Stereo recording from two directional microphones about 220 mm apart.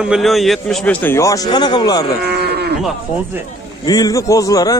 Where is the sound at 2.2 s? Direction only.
45° right (ahead or behind).